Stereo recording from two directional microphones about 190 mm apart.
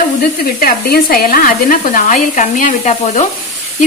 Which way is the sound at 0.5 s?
50° left (ahead or behind).